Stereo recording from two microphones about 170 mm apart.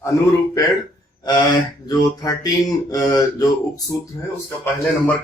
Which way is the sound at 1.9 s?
20° left (ahead or behind).